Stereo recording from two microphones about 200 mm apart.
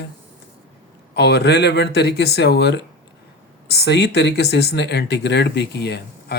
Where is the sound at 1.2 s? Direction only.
55° left (ahead or behind).